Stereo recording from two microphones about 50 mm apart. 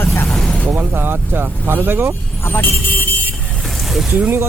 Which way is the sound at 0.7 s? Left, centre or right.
Right.